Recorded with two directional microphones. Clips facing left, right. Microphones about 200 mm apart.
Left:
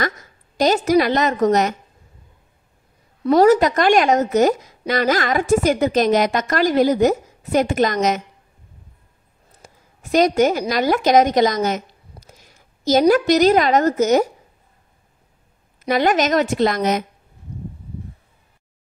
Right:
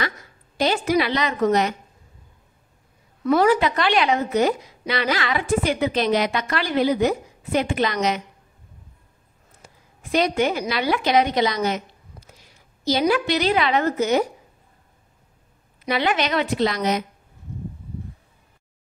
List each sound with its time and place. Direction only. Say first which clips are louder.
0.6 s a woman's voice: left 5 dB; 40° left (ahead or behind)
3.3 s a woman's voice: left 5 dB; 40° left (ahead or behind)
10.1 s a woman's voice: left 5 dB; 45° left (ahead or behind)
15.8 s a woman's voice: left 5 dB; 45° left (ahead or behind)